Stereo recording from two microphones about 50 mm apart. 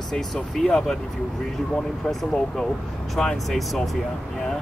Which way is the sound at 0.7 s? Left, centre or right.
Centre.